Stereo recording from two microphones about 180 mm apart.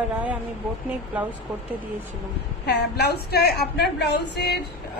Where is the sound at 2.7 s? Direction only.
65° left (ahead or behind).